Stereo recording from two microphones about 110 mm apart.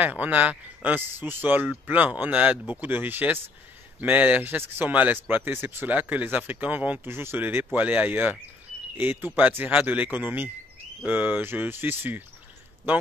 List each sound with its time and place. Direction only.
0.0 s speech: 15° right (ahead or behind)